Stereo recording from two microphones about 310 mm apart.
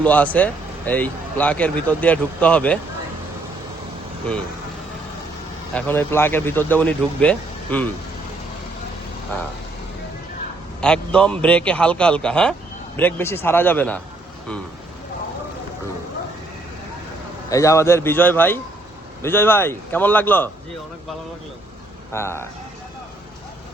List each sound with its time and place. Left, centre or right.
0.0 s speech: centre
5.7 s speech: centre
10.8 s speech: centre
17.5 s speech: centre
22.1 s speech: centre